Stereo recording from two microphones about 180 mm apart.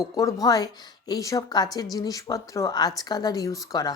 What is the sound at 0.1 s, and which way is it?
Speech, 20° left (ahead or behind).